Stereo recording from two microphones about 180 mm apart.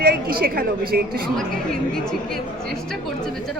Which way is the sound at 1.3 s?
5° left (ahead or behind).